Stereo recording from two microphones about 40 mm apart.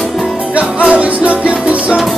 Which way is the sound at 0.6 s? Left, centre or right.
Right.